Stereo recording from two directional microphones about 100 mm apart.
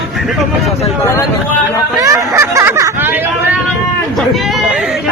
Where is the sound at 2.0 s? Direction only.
35° right (ahead or behind).